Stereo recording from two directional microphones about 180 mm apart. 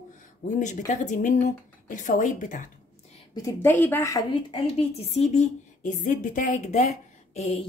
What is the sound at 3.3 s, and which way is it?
Speech, 15° left (ahead or behind).